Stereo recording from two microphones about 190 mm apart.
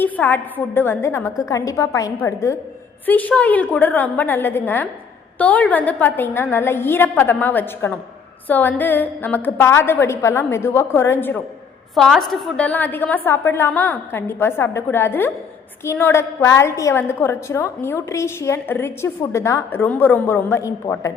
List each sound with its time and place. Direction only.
0.0 s a woman's voice: 10° left (ahead or behind)